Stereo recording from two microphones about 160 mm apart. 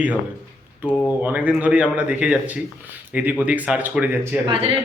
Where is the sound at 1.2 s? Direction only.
10° right (ahead or behind).